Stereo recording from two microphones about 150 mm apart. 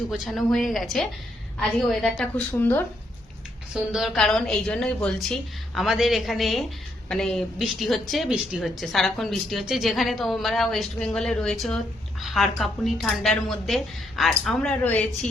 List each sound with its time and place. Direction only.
0.1 s a woman's voice: centre (ahead or behind)
3.8 s a woman's voice: centre (ahead or behind)